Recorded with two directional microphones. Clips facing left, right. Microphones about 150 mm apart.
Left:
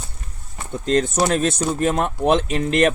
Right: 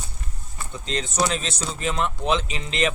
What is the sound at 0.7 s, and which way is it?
A man's voice, 55° left (ahead or behind).